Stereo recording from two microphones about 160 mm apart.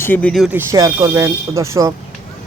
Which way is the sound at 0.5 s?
20° right (ahead or behind).